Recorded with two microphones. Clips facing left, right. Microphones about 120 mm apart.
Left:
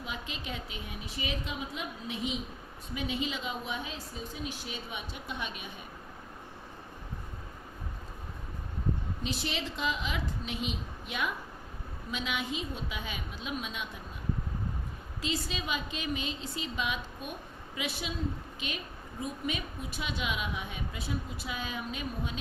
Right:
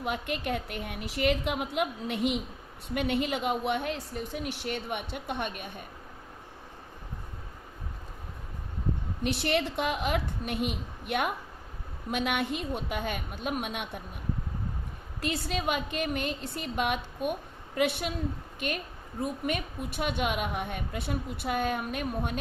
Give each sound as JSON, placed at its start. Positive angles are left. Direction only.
{"t": 0.0, "sound": "a woman's voice", "side_deg": -60}
{"t": 9.2, "sound": "a woman's voice", "side_deg": -60}
{"t": 15.2, "sound": "a woman's voice", "side_deg": -55}